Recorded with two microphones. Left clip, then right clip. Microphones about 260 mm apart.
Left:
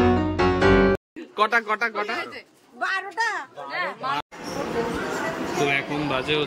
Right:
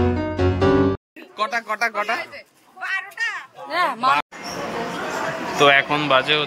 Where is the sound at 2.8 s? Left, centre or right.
Left.